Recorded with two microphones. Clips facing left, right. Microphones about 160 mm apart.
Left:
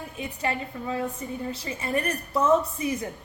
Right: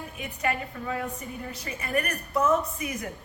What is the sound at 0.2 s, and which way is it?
A woman's voice, 25° left (ahead or behind).